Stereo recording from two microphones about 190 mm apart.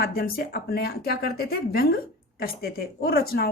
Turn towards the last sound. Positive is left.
turn(degrees=55)  # may be behind; listen again after turning